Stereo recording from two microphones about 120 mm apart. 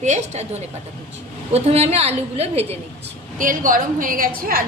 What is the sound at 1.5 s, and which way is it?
A woman's voice, 60° right (ahead or behind).